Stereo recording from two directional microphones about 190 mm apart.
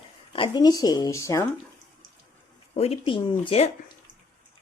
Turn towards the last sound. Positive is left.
turn(degrees=30)  # may be behind; listen again after turning